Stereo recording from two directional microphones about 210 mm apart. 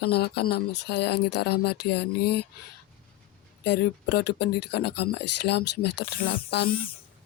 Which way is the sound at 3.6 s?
55° left (ahead or behind).